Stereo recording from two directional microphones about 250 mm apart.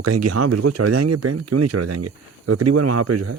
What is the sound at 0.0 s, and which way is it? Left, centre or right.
Speech, right.